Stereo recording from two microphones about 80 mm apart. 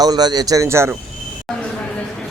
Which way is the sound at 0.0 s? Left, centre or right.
Right.